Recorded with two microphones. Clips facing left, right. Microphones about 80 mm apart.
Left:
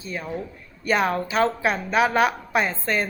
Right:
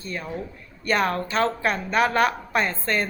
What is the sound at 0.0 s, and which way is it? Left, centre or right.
A woman's voice, centre.